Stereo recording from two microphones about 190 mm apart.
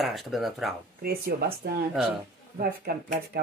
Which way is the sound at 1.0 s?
55° right (ahead or behind).